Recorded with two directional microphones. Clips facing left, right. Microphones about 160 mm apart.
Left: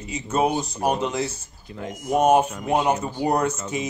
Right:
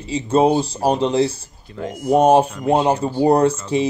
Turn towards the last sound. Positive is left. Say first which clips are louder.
# right 8 dB
turn(degrees=-30)  # may be behind; listen again after turning